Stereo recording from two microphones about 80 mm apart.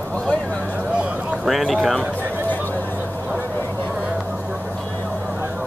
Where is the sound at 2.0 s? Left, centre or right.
Left.